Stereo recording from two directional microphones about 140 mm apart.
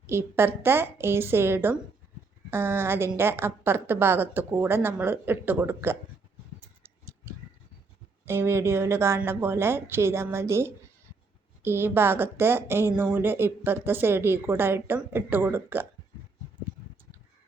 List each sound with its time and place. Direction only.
0.1 s a woman's voice: 15° right (ahead or behind)
6.8 s tick-tock: 20° right (ahead or behind)
8.2 s a woman's voice: 15° right (ahead or behind)